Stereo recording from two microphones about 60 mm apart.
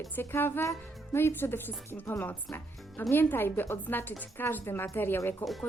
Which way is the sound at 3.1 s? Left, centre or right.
Left.